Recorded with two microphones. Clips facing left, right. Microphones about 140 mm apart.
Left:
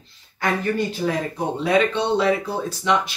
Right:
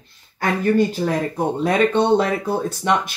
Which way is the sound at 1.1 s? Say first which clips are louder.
Right 3 dB; 50° right (ahead or behind).